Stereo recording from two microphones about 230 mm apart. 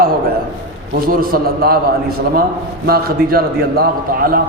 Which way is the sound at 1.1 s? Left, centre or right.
Right.